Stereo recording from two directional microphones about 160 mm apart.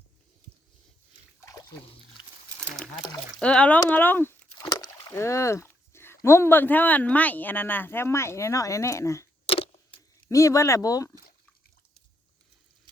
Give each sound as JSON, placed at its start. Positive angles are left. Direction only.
{"t": 1.4, "sound": "splash", "side_deg": 20}
{"t": 3.4, "sound": "speech", "side_deg": 5}
{"t": 9.5, "sound": "keys jangling", "side_deg": 35}
{"t": 10.2, "sound": "speech", "side_deg": 20}